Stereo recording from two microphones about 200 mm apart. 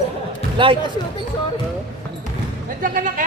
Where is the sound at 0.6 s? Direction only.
25° right (ahead or behind).